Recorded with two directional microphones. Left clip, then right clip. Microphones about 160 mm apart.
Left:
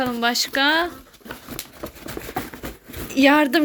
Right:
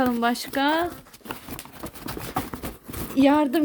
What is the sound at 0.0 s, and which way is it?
Speech, 25° right (ahead or behind).